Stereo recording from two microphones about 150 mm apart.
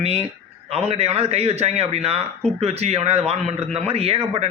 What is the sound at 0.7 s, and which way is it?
A man's voice, 40° right (ahead or behind).